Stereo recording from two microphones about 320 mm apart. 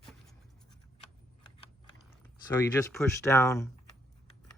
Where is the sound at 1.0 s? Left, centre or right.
Centre.